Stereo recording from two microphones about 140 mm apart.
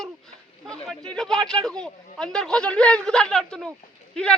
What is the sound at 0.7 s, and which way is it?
A man's voice, 5° left (ahead or behind).